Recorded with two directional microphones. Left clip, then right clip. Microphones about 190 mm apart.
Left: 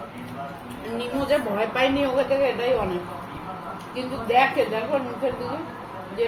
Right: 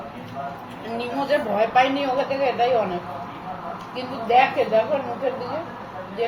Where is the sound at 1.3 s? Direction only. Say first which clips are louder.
Right 4 dB; 5° right (ahead or behind).